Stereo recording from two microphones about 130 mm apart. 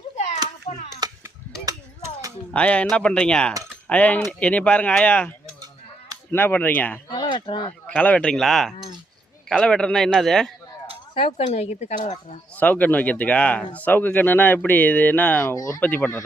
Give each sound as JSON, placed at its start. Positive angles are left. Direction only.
{"t": 0.7, "sound": "a sound", "side_deg": 45}
{"t": 1.0, "sound": "a sound", "side_deg": -30}
{"t": 2.5, "sound": "speech", "side_deg": 10}
{"t": 6.3, "sound": "speech", "side_deg": 15}
{"t": 7.1, "sound": "a sound", "side_deg": 35}
{"t": 7.9, "sound": "a man's voice", "side_deg": 10}
{"t": 11.1, "sound": "speech", "side_deg": 40}
{"t": 11.4, "sound": "speech", "side_deg": 55}
{"t": 12.5, "sound": "speech", "side_deg": 10}
{"t": 15.8, "sound": "speech", "side_deg": 15}